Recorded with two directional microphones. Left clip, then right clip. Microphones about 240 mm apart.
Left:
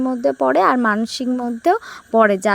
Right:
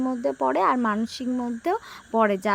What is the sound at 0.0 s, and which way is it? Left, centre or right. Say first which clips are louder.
Speech: left 7 dB; left.